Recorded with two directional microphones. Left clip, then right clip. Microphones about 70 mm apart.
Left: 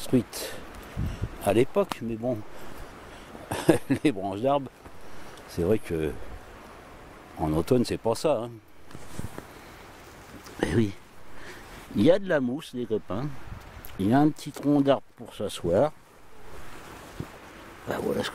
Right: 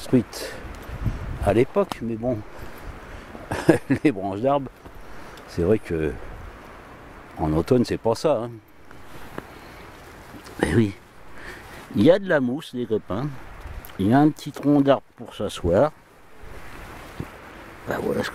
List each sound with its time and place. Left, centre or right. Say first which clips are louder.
0.0 s a sound: right 4 dB; centre
1.4 s speech: right 3 dB; centre
3.4 s speech: right 4 dB; centre
7.3 s speech: right 4 dB; centre
10.6 s speech: right 5 dB; centre
13.9 s speech: right 4 dB; centre
17.8 s speech: right 3 dB; centre